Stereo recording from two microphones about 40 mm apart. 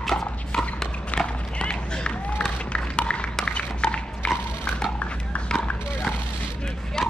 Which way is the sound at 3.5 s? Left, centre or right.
Left.